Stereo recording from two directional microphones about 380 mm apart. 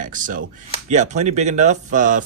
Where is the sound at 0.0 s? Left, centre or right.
Right.